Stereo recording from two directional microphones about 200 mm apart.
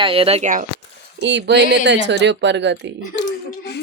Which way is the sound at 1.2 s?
60° right (ahead or behind).